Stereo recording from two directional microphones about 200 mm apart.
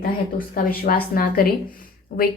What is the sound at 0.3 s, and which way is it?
Speech, 45° left (ahead or behind).